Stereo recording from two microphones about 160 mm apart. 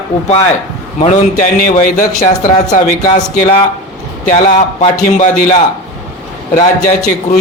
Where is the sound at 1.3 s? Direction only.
60° left (ahead or behind).